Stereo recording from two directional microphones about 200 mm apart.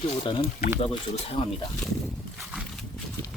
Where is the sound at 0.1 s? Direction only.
25° left (ahead or behind).